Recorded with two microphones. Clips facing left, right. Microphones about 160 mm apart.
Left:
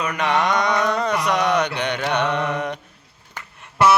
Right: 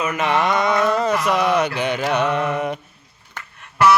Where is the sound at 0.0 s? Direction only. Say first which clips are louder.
Right 1 dB; 5° right (ahead or behind).